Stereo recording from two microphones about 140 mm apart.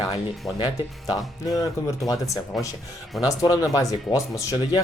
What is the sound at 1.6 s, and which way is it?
Speech, 25° left (ahead or behind).